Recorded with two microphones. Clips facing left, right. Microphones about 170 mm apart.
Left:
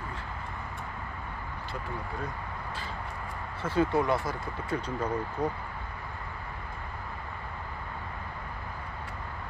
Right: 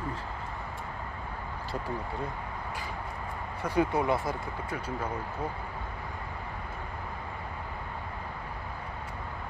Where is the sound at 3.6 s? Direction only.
15° right (ahead or behind).